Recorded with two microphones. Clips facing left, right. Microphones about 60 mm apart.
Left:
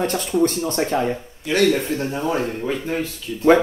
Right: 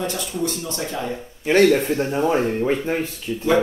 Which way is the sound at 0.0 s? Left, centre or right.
Left.